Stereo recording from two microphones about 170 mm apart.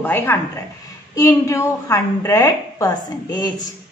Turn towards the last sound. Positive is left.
turn(degrees=20)  # may be behind; listen again after turning